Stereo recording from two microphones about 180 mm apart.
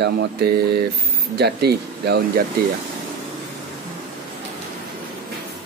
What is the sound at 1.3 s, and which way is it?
Speech, 65° right (ahead or behind).